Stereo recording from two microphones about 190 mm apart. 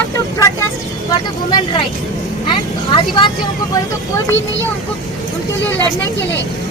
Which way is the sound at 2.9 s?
25° left (ahead or behind).